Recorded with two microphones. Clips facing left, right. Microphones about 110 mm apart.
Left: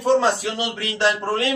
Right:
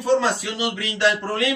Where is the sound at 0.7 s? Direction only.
35° left (ahead or behind).